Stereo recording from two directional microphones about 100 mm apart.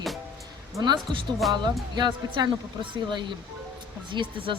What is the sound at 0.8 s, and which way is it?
Speech, 50° right (ahead or behind).